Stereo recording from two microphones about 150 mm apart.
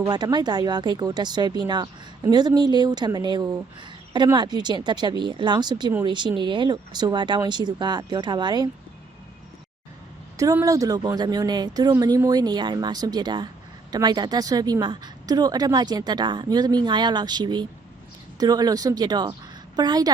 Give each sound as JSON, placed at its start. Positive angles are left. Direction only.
{"t": 0.1, "sound": "a woman's voice", "side_deg": -30}
{"t": 10.3, "sound": "a woman's voice", "side_deg": -20}